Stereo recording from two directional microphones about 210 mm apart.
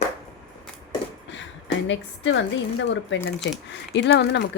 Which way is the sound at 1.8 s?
60° left (ahead or behind).